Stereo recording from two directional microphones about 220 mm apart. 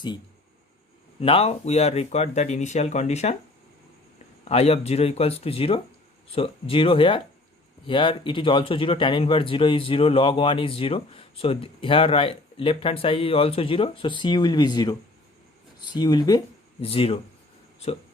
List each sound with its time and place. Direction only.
1.2 s speech: 25° left (ahead or behind)
4.4 s speech: 25° left (ahead or behind)